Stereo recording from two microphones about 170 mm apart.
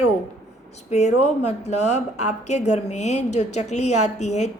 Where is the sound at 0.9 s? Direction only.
40° left (ahead or behind).